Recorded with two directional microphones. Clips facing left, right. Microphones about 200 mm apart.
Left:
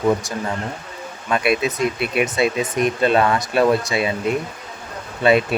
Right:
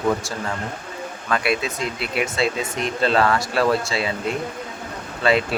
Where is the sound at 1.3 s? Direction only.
20° left (ahead or behind).